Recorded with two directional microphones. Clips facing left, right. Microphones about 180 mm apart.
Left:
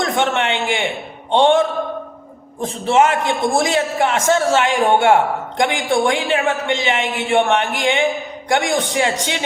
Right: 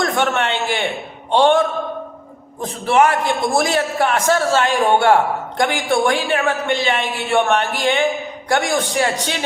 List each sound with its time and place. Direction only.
0.0 s a man's voice: 20° left (ahead or behind)
2.8 s a man's voice: 20° left (ahead or behind)